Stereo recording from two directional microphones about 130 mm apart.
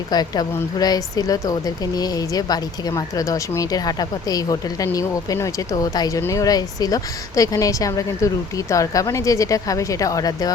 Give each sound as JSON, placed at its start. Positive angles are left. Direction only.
{"t": 0.1, "sound": "speech", "side_deg": 30}